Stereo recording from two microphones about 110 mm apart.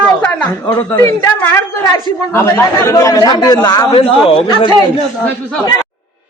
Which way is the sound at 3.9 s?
55° left (ahead or behind).